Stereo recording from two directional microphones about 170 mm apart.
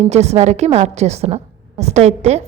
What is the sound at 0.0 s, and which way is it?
A woman's voice, 40° right (ahead or behind).